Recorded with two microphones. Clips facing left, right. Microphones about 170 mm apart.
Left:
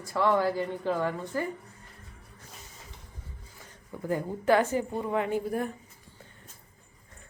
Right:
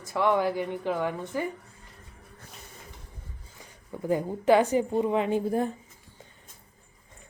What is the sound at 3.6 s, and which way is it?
A woman's voice, 15° right (ahead or behind).